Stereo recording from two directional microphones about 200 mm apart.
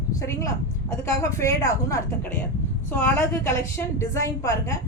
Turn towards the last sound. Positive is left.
turn(degrees=15)  # may be behind; listen again after turning